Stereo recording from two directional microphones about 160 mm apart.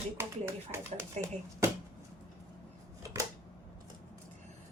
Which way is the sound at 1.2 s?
45° right (ahead or behind).